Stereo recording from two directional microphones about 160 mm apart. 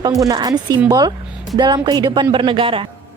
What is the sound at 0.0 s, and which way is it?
Speech, 20° right (ahead or behind).